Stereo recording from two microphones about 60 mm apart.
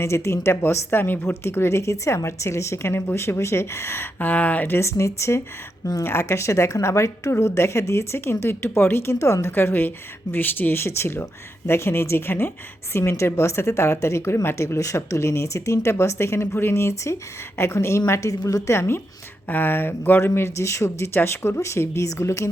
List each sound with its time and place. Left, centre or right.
0.0 s a woman's voice: left
4.7 s a woman's voice: left
14.8 s a woman's voice: left
18.7 s a woman's voice: left